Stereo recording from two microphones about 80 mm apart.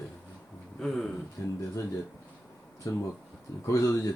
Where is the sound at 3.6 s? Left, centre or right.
Left.